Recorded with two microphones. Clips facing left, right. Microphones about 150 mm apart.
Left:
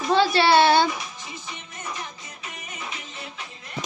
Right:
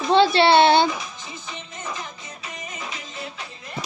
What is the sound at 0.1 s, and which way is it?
Speech, 25° right (ahead or behind).